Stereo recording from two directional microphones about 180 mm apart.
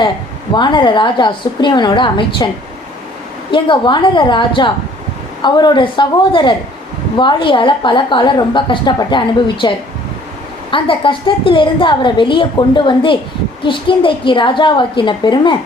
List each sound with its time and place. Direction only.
0.5 s a woman's voice: 25° left (ahead or behind)
3.5 s a woman's voice: 25° left (ahead or behind)